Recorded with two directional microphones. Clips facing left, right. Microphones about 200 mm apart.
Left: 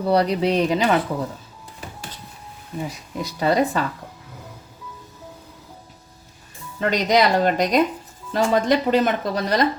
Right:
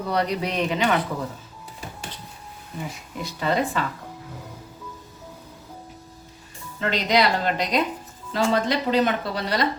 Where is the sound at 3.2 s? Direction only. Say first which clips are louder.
Left 4 dB; 40° left (ahead or behind).